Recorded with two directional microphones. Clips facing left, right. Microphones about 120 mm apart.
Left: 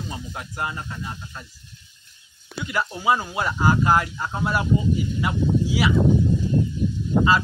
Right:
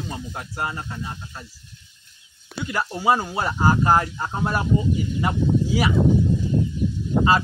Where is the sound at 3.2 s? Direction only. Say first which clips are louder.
Right 1 dB; 35° right (ahead or behind).